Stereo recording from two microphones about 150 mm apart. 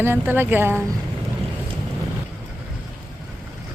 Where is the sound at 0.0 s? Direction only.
15° right (ahead or behind).